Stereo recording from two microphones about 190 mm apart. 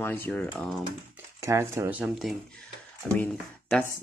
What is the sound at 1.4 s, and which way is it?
Speech, 15° right (ahead or behind).